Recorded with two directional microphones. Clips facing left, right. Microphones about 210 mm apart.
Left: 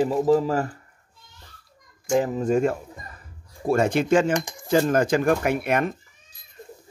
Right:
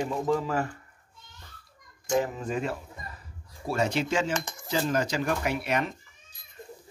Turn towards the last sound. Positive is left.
turn(degrees=50)  # may be behind; listen again after turning